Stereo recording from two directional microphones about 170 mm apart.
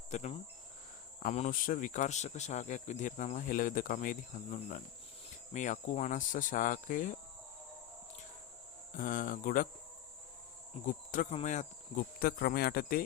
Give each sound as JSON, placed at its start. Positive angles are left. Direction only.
{"t": 0.1, "sound": "cricket", "side_deg": 45}
{"t": 1.2, "sound": "speech", "side_deg": 45}
{"t": 8.9, "sound": "speech", "side_deg": 55}
{"t": 10.8, "sound": "speech", "side_deg": 50}